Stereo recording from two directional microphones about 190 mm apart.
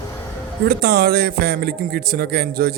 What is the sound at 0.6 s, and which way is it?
A man's voice, 55° right (ahead or behind).